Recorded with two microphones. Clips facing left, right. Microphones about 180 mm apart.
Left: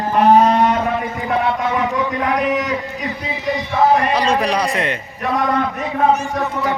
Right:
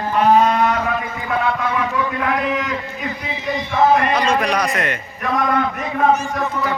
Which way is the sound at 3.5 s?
15° left (ahead or behind).